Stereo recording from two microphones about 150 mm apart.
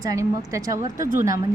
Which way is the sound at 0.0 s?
20° right (ahead or behind).